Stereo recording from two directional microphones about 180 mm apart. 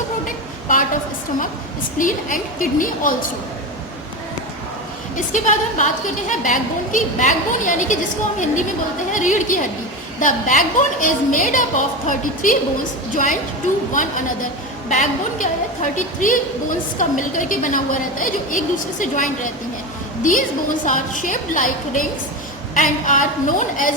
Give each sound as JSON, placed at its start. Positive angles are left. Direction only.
{"t": 0.3, "sound": "a sound", "side_deg": 45}
{"t": 2.0, "sound": "a woman's voice", "side_deg": 50}
{"t": 5.1, "sound": "a woman's voice", "side_deg": 45}
{"t": 9.1, "sound": "a woman's voice", "side_deg": 45}